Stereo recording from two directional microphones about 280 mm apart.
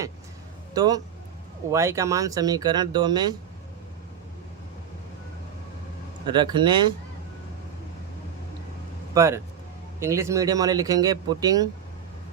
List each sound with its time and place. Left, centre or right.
0.7 s a man's voice: centre
6.2 s speech: centre
9.1 s speech: centre